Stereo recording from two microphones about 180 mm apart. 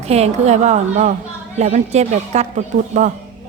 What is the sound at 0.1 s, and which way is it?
Speech, 35° right (ahead or behind).